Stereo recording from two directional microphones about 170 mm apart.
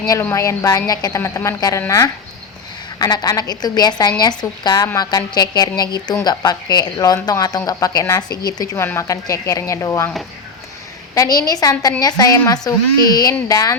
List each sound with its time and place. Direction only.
0.0 s a woman's voice: 20° left (ahead or behind)
11.1 s a woman's voice: 20° left (ahead or behind)